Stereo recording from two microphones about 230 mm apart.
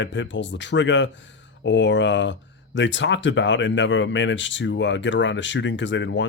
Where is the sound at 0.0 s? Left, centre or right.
Left.